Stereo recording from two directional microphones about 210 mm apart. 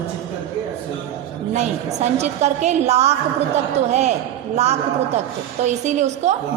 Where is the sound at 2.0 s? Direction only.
30° right (ahead or behind).